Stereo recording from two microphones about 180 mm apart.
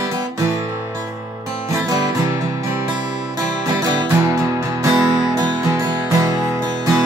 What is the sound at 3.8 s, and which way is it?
Music, 20° right (ahead or behind).